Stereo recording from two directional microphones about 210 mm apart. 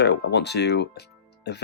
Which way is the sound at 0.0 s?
50° left (ahead or behind).